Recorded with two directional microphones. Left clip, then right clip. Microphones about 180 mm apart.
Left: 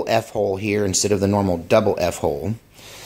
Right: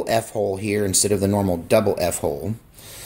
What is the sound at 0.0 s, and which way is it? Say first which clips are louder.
Speech: left 2 dB; 15° left (ahead or behind).